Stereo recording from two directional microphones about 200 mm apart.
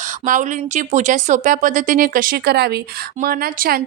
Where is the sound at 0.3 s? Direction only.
40° right (ahead or behind).